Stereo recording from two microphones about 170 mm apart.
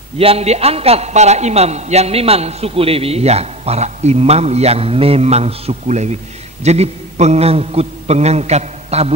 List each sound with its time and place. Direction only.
0.2 s a man's voice: 35° right (ahead or behind)